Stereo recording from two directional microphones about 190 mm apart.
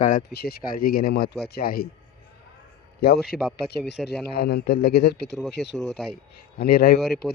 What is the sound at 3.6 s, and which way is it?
Speech, 60° left (ahead or behind).